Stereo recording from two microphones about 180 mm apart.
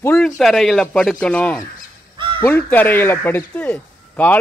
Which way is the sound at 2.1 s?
25° right (ahead or behind).